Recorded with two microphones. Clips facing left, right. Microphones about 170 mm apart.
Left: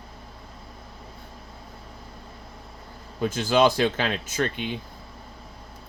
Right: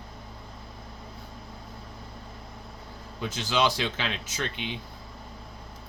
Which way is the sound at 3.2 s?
50° left (ahead or behind).